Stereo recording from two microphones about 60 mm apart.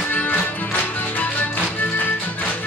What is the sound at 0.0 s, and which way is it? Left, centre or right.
Music, left.